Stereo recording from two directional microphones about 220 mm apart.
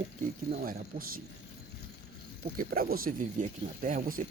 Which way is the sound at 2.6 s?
40° right (ahead or behind).